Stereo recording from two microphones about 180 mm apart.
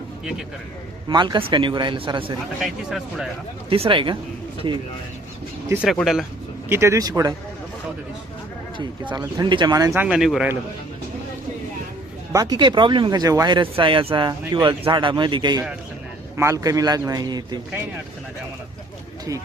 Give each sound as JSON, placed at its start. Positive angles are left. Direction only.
{"t": 1.0, "sound": "speech", "side_deg": -25}
{"t": 2.6, "sound": "speech", "side_deg": 0}
{"t": 3.7, "sound": "speech", "side_deg": -30}
{"t": 5.6, "sound": "speech", "side_deg": -10}
{"t": 6.7, "sound": "speech", "side_deg": -15}
{"t": 8.8, "sound": "speech", "side_deg": -25}
{"t": 12.3, "sound": "speech", "side_deg": -20}